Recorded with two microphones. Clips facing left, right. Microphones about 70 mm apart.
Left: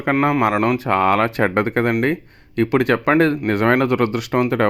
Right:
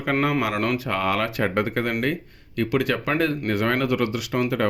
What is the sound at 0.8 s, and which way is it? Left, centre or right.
Speech, left.